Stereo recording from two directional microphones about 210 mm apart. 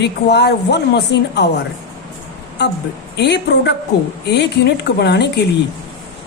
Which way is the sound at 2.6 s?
55° left (ahead or behind).